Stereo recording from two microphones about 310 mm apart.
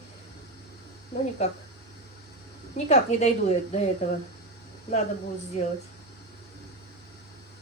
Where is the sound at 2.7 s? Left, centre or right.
Left.